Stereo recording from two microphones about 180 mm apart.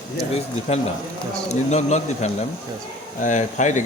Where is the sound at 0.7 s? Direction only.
35° left (ahead or behind).